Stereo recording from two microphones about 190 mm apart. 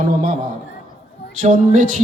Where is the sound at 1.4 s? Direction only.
45° right (ahead or behind).